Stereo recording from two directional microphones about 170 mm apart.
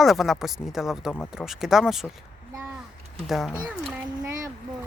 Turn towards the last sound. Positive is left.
turn(degrees=-20)  # may be behind; listen again after turning